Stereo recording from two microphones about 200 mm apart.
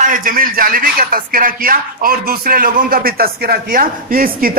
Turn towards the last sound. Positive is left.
turn(degrees=-45)  # may be behind; listen again after turning